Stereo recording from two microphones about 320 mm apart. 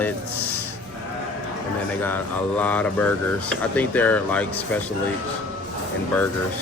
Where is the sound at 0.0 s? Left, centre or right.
Centre.